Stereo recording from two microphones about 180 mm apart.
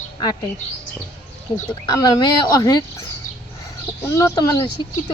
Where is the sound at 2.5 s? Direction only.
20° left (ahead or behind).